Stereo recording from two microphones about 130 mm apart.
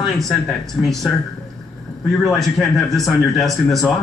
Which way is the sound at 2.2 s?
Centre (ahead or behind).